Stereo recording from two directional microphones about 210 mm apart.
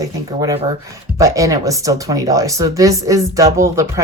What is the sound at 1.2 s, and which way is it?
Speech, 15° right (ahead or behind).